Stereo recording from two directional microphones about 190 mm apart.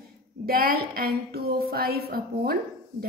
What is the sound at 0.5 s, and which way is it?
A woman's voice, 50° right (ahead or behind).